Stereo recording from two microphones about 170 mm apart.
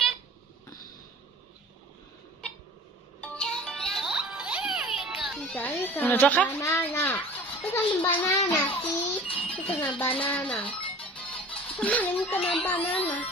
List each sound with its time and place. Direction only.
3.2 s music: 5° left (ahead or behind)
5.5 s speech: 10° left (ahead or behind)
9.3 s music: 35° left (ahead or behind)
9.8 s speech: 10° left (ahead or behind)
10.7 s music: 10° left (ahead or behind)
12.8 s music: 30° left (ahead or behind)